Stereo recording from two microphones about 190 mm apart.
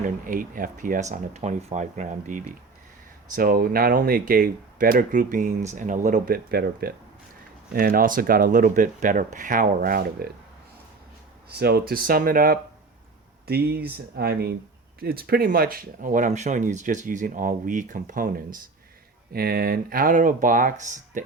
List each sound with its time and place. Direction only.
0.0 s speech: 45° right (ahead or behind)
11.4 s speech: 55° right (ahead or behind)